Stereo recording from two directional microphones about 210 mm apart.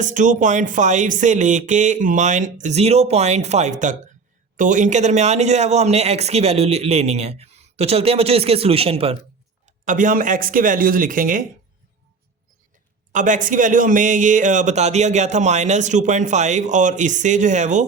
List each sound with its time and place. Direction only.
0.0 s speech: 35° right (ahead or behind)
13.1 s speech: 35° right (ahead or behind)